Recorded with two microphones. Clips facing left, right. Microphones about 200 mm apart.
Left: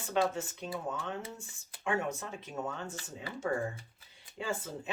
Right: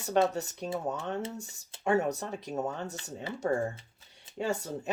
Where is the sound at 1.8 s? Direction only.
40° right (ahead or behind).